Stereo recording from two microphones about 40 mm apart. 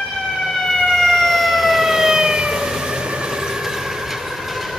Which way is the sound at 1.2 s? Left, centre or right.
Centre.